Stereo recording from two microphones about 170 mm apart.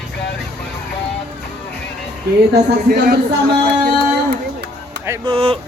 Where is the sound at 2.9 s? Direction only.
60° right (ahead or behind).